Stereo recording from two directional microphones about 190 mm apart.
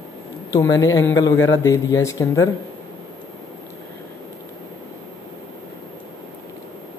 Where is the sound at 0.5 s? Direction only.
20° left (ahead or behind).